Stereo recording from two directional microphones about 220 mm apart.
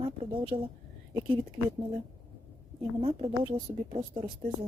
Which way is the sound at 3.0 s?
25° right (ahead or behind).